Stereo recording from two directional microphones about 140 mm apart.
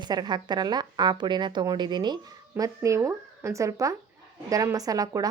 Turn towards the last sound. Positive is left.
turn(degrees=-25)  # may be behind; listen again after turning